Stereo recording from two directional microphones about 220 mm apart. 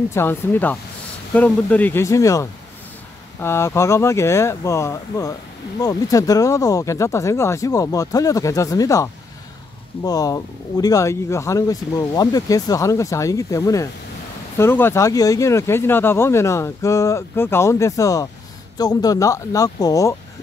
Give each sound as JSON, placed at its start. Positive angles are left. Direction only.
{"t": 0.1, "sound": "speech", "side_deg": 10}